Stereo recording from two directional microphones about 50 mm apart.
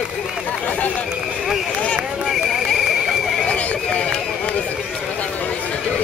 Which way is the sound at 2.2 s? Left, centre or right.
Centre.